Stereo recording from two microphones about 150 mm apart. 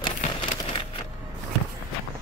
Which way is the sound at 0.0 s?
35° left (ahead or behind).